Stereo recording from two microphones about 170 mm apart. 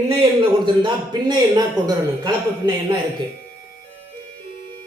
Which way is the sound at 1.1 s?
25° right (ahead or behind).